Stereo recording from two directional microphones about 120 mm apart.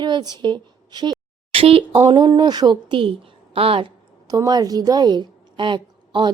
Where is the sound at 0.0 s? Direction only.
35° right (ahead or behind).